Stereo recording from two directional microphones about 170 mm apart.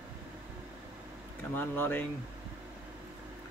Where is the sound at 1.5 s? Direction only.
10° left (ahead or behind).